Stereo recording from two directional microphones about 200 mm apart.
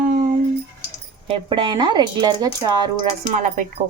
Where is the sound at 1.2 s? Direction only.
25° right (ahead or behind).